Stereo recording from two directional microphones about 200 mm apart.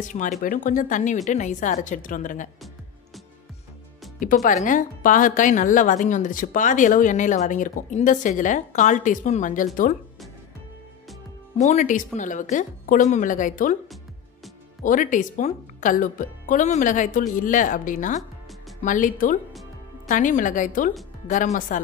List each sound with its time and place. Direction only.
0.0 s speech: 40° left (ahead or behind)
4.2 s speech: 40° left (ahead or behind)
11.5 s speech: 35° left (ahead or behind)
14.8 s speech: 40° left (ahead or behind)